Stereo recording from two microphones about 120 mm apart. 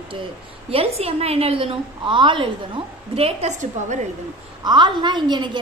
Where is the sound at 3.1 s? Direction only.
55° right (ahead or behind).